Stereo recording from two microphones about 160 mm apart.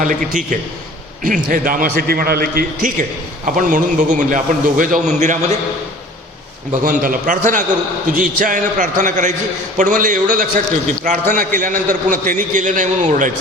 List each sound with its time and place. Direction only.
0.0 s a man's voice: 55° right (ahead or behind)
3.4 s a man's voice: 55° right (ahead or behind)
6.7 s a man's voice: 60° right (ahead or behind)